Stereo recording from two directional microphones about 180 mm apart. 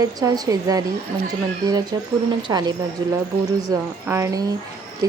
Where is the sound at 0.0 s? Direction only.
20° right (ahead or behind).